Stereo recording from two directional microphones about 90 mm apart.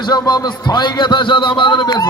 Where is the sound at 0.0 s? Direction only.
50° left (ahead or behind).